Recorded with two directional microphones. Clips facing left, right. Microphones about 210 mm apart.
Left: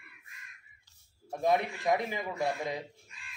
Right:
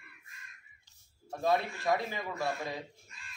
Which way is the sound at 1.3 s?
20° left (ahead or behind).